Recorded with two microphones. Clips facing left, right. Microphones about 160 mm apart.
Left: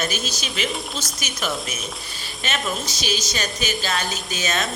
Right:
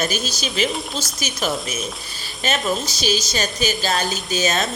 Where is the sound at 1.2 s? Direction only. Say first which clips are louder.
Right 4 dB; 35° right (ahead or behind).